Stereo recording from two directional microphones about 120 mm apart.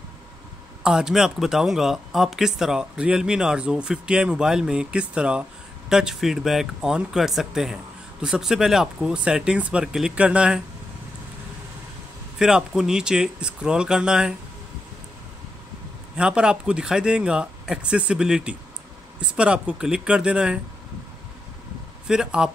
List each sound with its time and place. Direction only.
0.8 s speech: 5° right (ahead or behind)
12.4 s speech: 5° right (ahead or behind)
16.2 s speech: 10° right (ahead or behind)
22.0 s speech: 5° right (ahead or behind)